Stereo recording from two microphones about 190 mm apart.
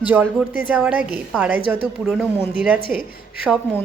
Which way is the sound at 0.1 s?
10° right (ahead or behind).